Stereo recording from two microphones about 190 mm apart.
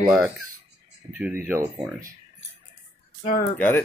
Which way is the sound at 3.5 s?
10° left (ahead or behind).